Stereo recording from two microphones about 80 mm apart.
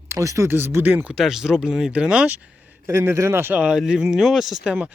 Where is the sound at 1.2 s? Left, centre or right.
Centre.